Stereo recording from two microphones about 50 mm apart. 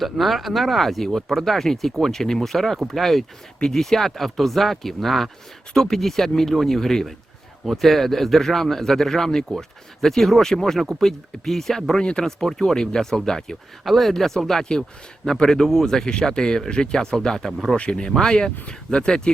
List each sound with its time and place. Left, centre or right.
0.0 s speech: centre